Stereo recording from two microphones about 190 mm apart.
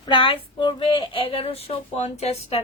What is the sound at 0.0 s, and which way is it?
Speech, 25° left (ahead or behind).